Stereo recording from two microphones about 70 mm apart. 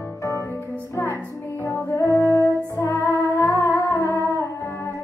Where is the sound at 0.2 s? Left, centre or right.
Left.